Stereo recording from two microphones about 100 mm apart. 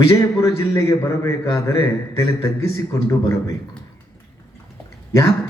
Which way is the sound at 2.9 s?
30° left (ahead or behind).